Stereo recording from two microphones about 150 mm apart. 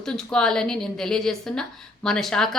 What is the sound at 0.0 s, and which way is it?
A woman's voice, 5° left (ahead or behind).